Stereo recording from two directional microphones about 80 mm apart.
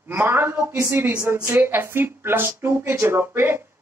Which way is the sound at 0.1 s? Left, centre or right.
Right.